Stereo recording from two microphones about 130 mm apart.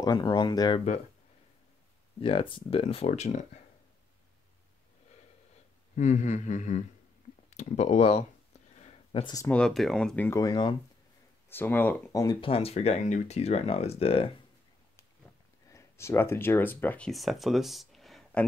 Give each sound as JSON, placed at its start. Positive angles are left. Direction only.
{"t": 0.0, "sound": "speech", "side_deg": 35}
{"t": 2.1, "sound": "speech", "side_deg": 45}
{"t": 5.9, "sound": "a sound", "side_deg": 70}
{"t": 7.4, "sound": "speech", "side_deg": 60}
{"t": 8.7, "sound": "a sound", "side_deg": 55}
{"t": 9.2, "sound": "speech", "side_deg": 30}
{"t": 9.5, "sound": "speech", "side_deg": 5}
{"t": 10.4, "sound": "speech", "side_deg": 35}
{"t": 11.4, "sound": "speech", "side_deg": 15}
{"t": 12.1, "sound": "speech", "side_deg": 25}
{"t": 12.4, "sound": "speech", "side_deg": 45}
{"t": 15.7, "sound": "speech", "side_deg": 20}
{"t": 17.1, "sound": "speech", "side_deg": 0}